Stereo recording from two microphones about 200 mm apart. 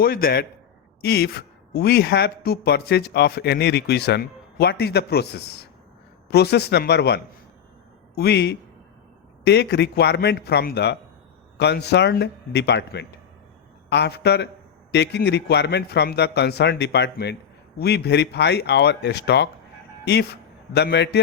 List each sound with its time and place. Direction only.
0.0 s a man's voice: 50° left (ahead or behind)